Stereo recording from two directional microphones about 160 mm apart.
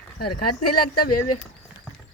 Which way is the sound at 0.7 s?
70° left (ahead or behind).